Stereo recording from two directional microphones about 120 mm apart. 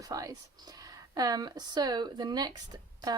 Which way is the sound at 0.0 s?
30° right (ahead or behind).